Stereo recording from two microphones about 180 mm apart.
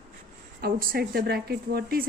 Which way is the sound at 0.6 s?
55° right (ahead or behind).